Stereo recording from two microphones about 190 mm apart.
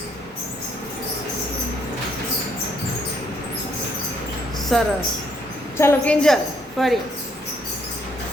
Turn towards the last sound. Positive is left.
turn(degrees=0)  # may be behind; listen again after turning